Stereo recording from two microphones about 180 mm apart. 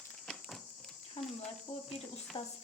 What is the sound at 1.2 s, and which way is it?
Speech, 35° left (ahead or behind).